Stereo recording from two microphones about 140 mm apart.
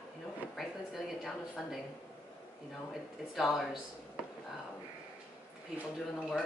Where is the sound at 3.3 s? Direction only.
Centre (ahead or behind).